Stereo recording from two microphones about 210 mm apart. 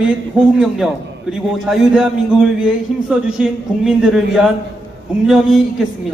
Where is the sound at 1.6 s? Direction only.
Centre (ahead or behind).